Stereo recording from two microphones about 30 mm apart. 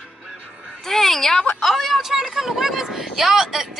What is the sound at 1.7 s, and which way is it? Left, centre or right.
Speech, centre.